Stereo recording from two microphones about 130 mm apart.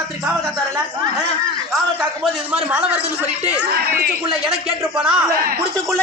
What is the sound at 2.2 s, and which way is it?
Speech, 5° right (ahead or behind).